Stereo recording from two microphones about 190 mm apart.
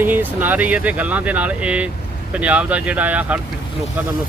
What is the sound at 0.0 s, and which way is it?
Speech, 10° right (ahead or behind).